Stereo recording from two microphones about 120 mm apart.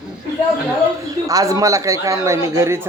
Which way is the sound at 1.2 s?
30° right (ahead or behind).